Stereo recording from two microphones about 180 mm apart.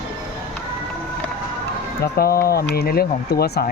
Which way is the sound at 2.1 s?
55° left (ahead or behind).